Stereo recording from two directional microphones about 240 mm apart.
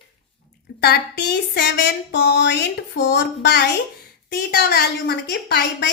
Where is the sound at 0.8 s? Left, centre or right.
Left.